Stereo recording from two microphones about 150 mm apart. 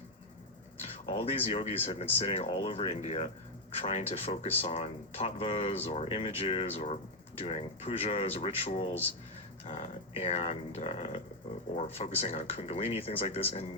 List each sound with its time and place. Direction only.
1.0 s speech: 40° left (ahead or behind)